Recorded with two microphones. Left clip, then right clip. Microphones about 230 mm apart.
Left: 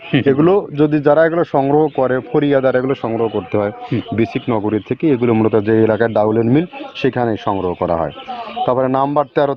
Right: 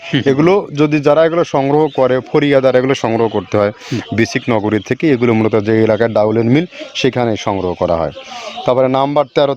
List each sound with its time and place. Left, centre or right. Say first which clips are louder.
0.3 s a man's voice: right 2 dB; right